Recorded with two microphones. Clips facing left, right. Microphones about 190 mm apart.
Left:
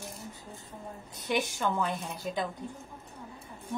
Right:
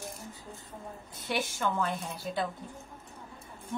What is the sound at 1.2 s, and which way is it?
Music, 15° left (ahead or behind).